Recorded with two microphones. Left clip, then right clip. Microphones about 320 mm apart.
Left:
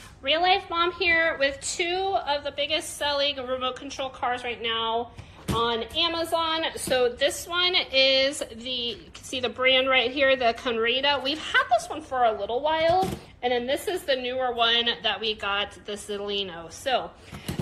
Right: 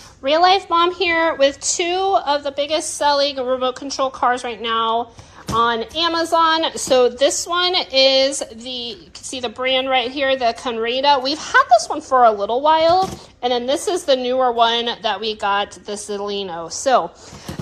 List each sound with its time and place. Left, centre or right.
0.2 s a woman's voice: centre